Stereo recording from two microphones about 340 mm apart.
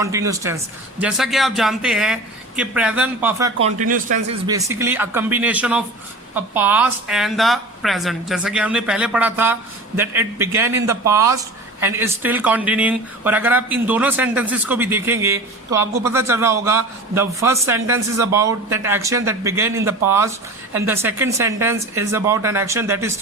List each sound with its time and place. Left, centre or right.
0.0 s speech: centre
3.8 s speech: right
4.4 s speech: centre